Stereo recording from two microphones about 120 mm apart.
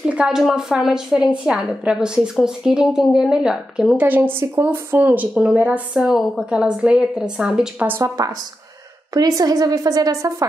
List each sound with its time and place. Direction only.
0.1 s a woman's voice: 5° right (ahead or behind)
8.2 s a woman's voice: 30° right (ahead or behind)